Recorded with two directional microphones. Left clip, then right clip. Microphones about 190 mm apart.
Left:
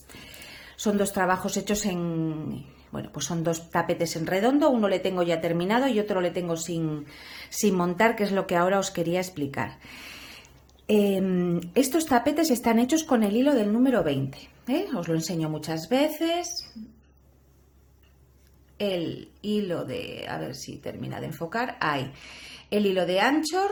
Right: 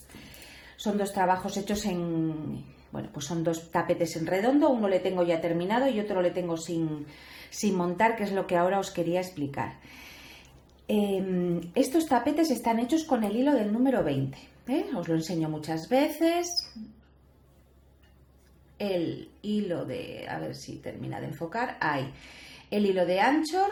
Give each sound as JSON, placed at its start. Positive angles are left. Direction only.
{"t": 0.8, "sound": "speech", "side_deg": 30}
{"t": 10.8, "sound": "speech", "side_deg": 30}
{"t": 19.4, "sound": "speech", "side_deg": 25}